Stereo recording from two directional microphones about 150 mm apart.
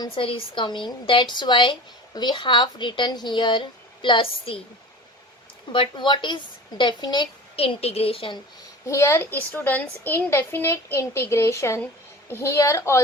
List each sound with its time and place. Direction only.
0.0 s speech: 35° left (ahead or behind)
5.7 s speech: 35° left (ahead or behind)
7.5 s speech: 40° left (ahead or behind)
8.9 s a child's voice: 20° left (ahead or behind)